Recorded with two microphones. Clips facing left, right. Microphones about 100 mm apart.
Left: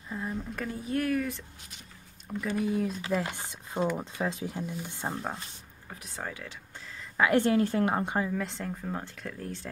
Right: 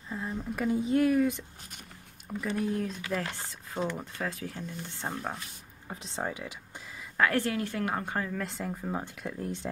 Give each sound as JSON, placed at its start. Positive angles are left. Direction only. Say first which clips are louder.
{"t": 0.1, "sound": "a sound", "louder": "even", "side_deg": 0}
{"t": 0.7, "sound": "speech", "louder": "right 5 dB", "side_deg": -20}
{"t": 2.2, "sound": "speech", "louder": "left 1 dB", "side_deg": 0}
{"t": 3.2, "sound": "speech", "louder": "left 2 dB", "side_deg": 15}
{"t": 4.6, "sound": "speech", "louder": "left 3 dB", "side_deg": 10}
{"t": 5.9, "sound": "speech", "louder": "right 4 dB", "side_deg": -25}
{"t": 7.3, "sound": "a woman's voice", "louder": "left 6 dB", "side_deg": 30}
{"t": 8.3, "sound": "speech", "louder": "left 1 dB", "side_deg": 0}